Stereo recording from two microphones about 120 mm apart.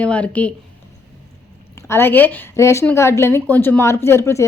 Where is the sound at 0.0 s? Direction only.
10° left (ahead or behind).